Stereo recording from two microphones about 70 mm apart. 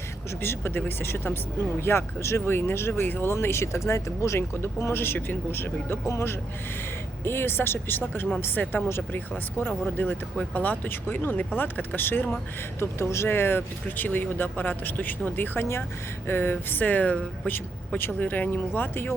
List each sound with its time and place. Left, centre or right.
0.4 s speech: left
12.8 s speech: left